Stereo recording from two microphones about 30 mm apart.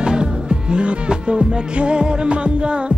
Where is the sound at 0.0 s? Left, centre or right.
Right.